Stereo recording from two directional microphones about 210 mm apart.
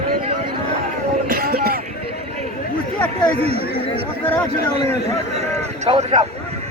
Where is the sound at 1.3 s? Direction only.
45° right (ahead or behind).